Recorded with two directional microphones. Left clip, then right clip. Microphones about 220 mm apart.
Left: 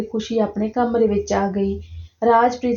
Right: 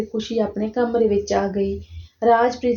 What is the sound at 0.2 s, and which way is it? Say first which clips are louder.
A woman's voice: left 2 dB; 30° left (ahead or behind).